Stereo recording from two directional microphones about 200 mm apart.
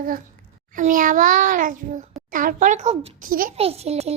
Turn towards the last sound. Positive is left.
turn(degrees=-30)  # may be behind; listen again after turning